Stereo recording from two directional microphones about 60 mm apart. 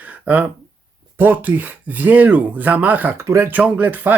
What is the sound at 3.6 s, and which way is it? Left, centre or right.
Speech, right.